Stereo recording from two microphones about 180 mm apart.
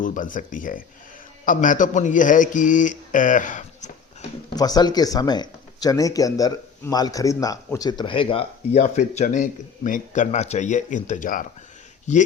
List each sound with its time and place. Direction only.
0.0 s speech: 45° left (ahead or behind)
4.4 s a man's voice: 20° left (ahead or behind); by 12.2 s 40° left (ahead or behind)